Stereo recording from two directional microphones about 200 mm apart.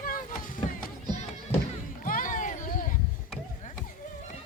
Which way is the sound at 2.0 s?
45° left (ahead or behind).